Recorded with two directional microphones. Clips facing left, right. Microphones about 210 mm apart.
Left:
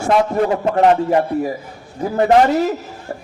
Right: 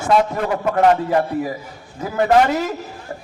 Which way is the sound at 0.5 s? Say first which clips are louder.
Even; 25° left (ahead or behind).